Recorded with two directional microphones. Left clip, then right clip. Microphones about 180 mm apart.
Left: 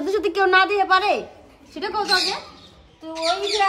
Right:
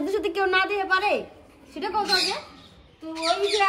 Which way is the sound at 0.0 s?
15° left (ahead or behind).